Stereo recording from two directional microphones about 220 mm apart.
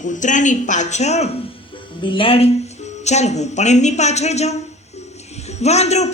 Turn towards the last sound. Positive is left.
turn(degrees=30)  # may be behind; listen again after turning